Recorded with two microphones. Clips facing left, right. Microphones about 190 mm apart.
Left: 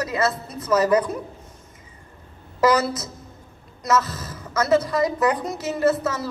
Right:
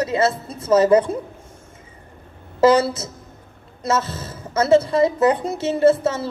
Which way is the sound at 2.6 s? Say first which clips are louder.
Right 4 dB; 25° right (ahead or behind).